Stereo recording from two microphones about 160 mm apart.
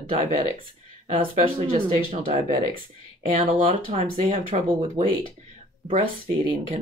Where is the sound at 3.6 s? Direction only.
35° right (ahead or behind).